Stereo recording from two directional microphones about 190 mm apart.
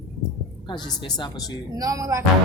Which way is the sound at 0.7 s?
20° left (ahead or behind).